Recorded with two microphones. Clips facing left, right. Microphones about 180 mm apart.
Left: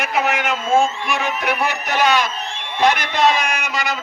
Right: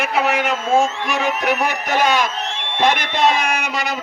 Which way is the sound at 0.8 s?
75° right (ahead or behind).